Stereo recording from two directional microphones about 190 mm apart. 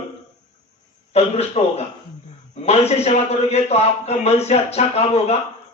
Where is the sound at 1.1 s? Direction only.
35° left (ahead or behind).